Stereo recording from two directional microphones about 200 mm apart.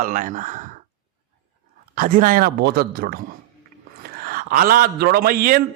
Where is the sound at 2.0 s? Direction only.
45° right (ahead or behind).